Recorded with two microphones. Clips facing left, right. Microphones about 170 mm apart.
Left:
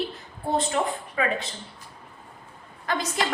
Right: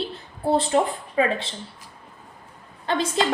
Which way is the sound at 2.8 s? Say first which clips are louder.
Right 4 dB; 30° right (ahead or behind).